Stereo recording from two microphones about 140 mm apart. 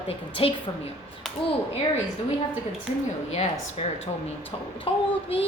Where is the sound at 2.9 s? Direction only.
45° left (ahead or behind).